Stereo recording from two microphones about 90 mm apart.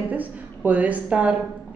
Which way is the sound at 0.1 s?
20° right (ahead or behind).